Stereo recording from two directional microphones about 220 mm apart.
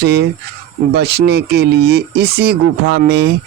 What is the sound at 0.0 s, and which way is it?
Speech, 50° right (ahead or behind).